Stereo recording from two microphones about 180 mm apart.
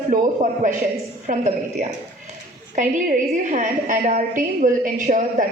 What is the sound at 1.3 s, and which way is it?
A woman's voice, 45° right (ahead or behind).